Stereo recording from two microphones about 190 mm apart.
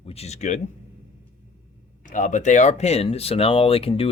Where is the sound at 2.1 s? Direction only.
40° left (ahead or behind).